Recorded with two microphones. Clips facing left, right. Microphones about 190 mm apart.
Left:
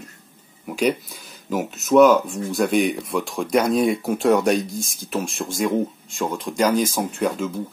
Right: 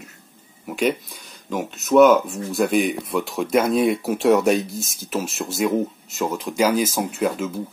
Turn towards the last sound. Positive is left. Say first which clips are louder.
# even
turn(degrees=-5)  # may be behind; listen again after turning